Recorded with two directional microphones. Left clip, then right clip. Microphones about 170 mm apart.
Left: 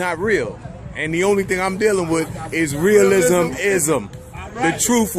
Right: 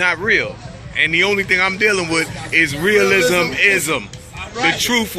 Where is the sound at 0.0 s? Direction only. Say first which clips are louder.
Right 4 dB; 25° left (ahead or behind).